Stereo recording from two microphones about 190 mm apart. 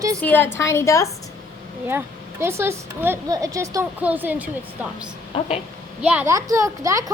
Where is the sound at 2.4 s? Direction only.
15° right (ahead or behind).